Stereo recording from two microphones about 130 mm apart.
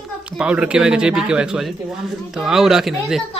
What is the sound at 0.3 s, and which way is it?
Speech, 10° right (ahead or behind).